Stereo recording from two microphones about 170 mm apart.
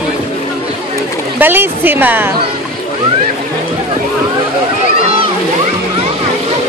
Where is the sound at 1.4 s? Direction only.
10° right (ahead or behind).